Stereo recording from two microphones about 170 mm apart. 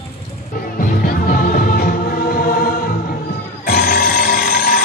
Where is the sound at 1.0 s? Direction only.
60° left (ahead or behind).